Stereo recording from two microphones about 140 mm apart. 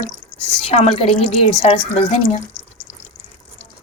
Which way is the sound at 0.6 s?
50° left (ahead or behind).